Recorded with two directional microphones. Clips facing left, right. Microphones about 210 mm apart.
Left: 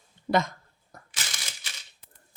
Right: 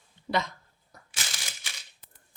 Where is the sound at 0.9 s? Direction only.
50° left (ahead or behind).